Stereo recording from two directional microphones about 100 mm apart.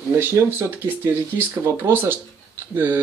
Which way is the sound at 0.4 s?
25° right (ahead or behind).